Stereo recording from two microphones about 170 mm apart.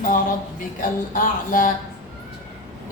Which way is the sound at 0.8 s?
50° left (ahead or behind).